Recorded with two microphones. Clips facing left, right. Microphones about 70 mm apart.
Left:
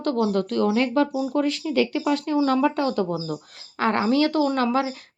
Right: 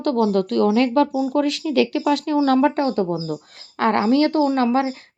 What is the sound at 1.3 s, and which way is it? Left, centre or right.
Speech, right.